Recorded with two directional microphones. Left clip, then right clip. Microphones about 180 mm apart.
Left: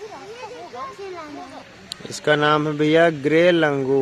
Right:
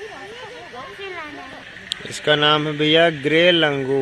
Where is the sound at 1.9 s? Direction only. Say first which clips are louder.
Right 1 dB; 10° left (ahead or behind).